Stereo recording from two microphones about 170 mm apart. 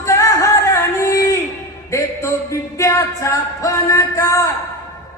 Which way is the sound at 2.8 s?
15° left (ahead or behind).